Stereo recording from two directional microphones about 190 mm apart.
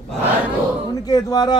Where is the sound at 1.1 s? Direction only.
20° left (ahead or behind).